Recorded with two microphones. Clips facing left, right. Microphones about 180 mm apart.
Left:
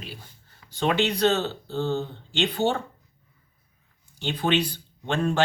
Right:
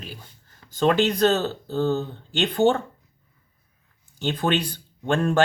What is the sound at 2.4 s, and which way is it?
Speech, 45° right (ahead or behind).